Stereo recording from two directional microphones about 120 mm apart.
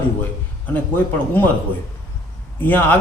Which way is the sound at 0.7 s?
15° left (ahead or behind).